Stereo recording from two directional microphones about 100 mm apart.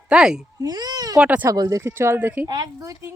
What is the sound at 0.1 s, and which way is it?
Speech, 5° right (ahead or behind).